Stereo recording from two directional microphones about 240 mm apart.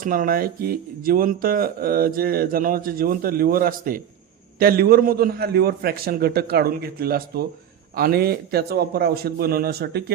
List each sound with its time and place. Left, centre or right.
0.0 s speech: right